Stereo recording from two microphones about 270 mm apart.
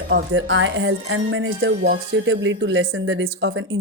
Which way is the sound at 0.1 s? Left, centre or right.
Right.